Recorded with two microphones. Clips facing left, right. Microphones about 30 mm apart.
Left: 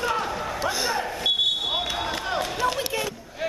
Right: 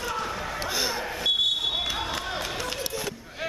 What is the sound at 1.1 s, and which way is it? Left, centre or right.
Smoke detector, centre.